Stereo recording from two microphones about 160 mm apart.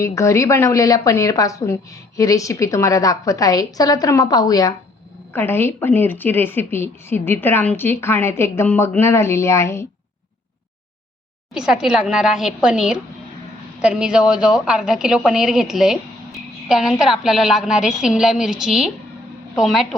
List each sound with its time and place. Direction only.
0.0 s a woman's voice: 20° left (ahead or behind)
11.5 s a woman's voice: 5° right (ahead or behind)